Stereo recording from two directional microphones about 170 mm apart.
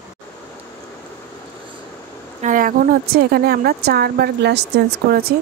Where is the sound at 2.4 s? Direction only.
55° right (ahead or behind); by 4.6 s 80° right.